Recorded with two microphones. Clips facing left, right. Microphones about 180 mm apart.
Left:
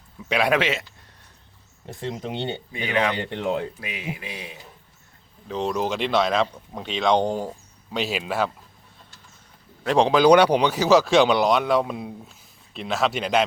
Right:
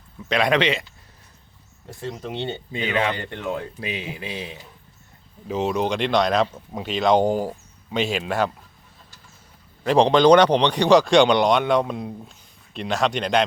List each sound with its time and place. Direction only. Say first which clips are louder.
0.3 s a man's voice: right 1 dB; 5° left (ahead or behind)
1.9 s speech: left 1 dB; 20° left (ahead or behind)
2.7 s speech: even; 25° right (ahead or behind)
5.5 s a man's voice: right 2 dB; 5° right (ahead or behind)
9.8 s a man's voice: right 2 dB; centre (ahead or behind)